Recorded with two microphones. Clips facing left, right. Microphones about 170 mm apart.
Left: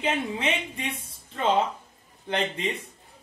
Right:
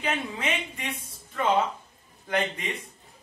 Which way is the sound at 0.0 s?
25° left (ahead or behind).